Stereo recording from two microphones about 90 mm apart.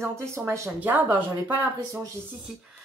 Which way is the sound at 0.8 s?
20° right (ahead or behind).